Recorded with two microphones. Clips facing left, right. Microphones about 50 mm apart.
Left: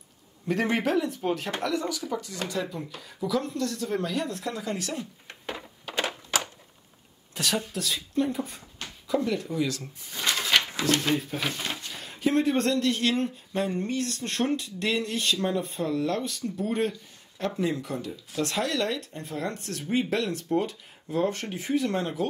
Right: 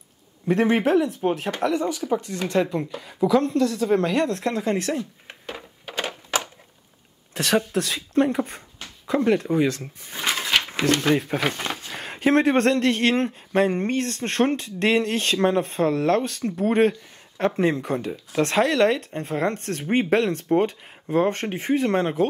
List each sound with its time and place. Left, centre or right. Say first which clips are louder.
0.5 s speech: right 6 dB; right
2.5 s speech: right 12 dB; right
5.9 s a sound: right 1 dB; centre
7.3 s speech: right 7 dB; right
10.8 s speech: right 4 dB; right
11.1 s speech: right 6 dB; right